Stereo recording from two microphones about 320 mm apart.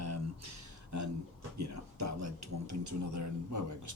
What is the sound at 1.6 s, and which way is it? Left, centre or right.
A man's voice, right.